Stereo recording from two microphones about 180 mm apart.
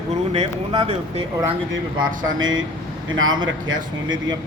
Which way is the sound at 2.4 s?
90° right.